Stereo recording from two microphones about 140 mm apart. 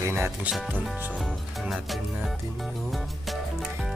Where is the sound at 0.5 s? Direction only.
Centre (ahead or behind).